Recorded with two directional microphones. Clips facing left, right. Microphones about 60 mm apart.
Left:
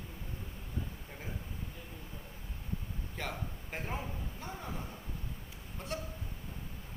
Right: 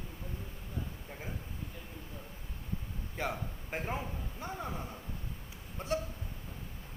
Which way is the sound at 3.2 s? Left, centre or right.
Centre.